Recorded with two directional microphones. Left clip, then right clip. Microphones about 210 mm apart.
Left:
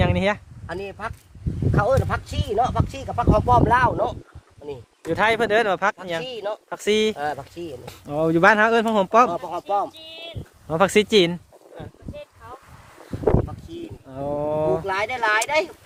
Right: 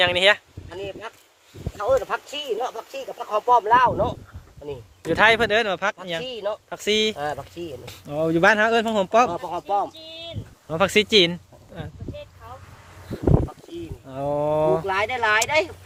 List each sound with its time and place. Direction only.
0.0 s speech: centre (ahead or behind)
0.8 s speech: 15° left (ahead or behind)
5.5 s speech: 25° left (ahead or behind)
9.9 s speech: 40° left (ahead or behind)
10.7 s speech: 25° left (ahead or behind)
11.8 s speech: 5° left (ahead or behind)
14.1 s speech: centre (ahead or behind)